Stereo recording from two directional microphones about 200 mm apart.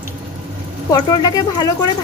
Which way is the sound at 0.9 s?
20° left (ahead or behind).